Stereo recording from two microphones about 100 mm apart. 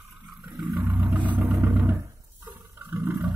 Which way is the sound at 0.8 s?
20° right (ahead or behind).